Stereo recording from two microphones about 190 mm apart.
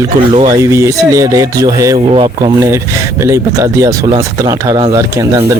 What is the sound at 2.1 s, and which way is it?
Speech, 30° right (ahead or behind).